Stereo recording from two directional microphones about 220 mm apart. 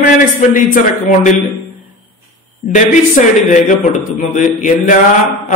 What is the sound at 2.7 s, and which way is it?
A man's voice, 35° left (ahead or behind).